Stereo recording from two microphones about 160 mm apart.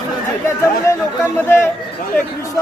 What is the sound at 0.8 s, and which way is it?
Speech, 20° left (ahead or behind).